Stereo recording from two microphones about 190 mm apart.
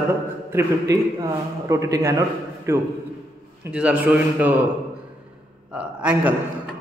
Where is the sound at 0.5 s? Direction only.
15° right (ahead or behind).